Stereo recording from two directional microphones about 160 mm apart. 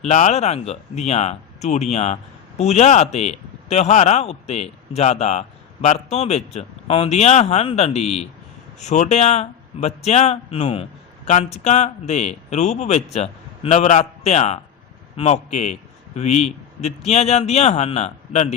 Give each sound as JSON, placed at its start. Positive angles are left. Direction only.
{"t": 0.0, "sound": "a man's voice", "side_deg": 45}